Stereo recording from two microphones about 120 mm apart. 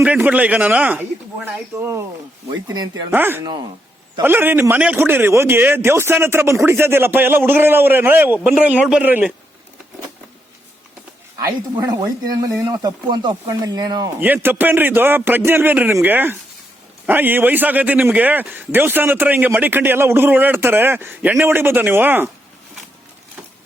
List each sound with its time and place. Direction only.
0.0 s a man's voice: 10° right (ahead or behind)
2.6 s speech: 35° right (ahead or behind)
3.1 s a man's voice: 15° right (ahead or behind)
11.3 s speech: 30° right (ahead or behind)
14.2 s a man's voice: 15° right (ahead or behind)